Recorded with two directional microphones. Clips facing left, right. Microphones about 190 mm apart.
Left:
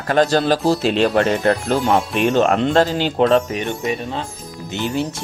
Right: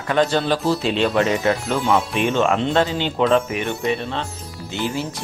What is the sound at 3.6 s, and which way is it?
Speech, 15° left (ahead or behind).